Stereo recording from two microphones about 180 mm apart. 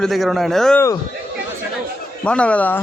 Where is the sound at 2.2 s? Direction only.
5° left (ahead or behind).